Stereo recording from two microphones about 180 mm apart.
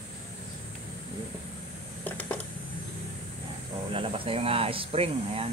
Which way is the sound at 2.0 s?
10° left (ahead or behind).